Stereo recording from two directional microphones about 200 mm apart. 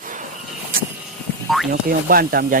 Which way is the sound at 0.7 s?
45° right (ahead or behind).